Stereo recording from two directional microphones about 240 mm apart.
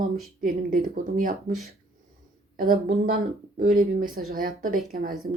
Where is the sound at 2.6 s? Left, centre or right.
Right.